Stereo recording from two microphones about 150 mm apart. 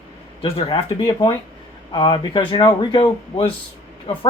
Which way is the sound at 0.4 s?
35° left (ahead or behind).